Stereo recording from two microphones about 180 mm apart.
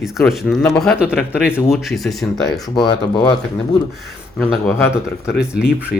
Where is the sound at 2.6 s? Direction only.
25° left (ahead or behind).